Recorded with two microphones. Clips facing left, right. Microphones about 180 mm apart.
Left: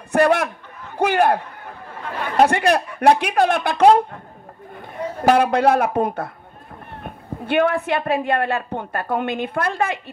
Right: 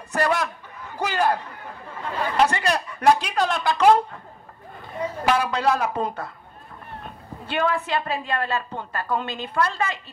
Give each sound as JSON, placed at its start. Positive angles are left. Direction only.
{"t": 0.1, "sound": "a woman's voice", "side_deg": 55}
{"t": 5.2, "sound": "a woman's voice", "side_deg": 55}